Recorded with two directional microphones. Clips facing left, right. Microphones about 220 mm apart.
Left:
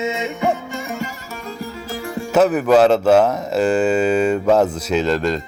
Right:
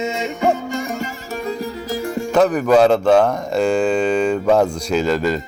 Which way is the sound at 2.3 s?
5° left (ahead or behind).